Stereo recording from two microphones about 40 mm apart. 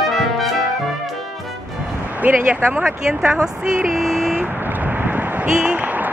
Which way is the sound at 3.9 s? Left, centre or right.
Centre.